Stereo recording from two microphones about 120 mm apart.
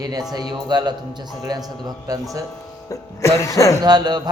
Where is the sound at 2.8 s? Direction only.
25° left (ahead or behind).